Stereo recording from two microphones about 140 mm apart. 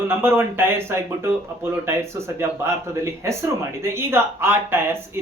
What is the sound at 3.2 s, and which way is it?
Speech, 20° right (ahead or behind).